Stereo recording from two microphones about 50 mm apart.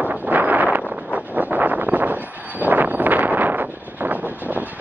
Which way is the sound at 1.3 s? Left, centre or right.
Right.